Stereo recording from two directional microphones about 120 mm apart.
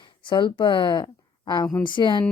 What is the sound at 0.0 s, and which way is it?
Speech, 40° left (ahead or behind).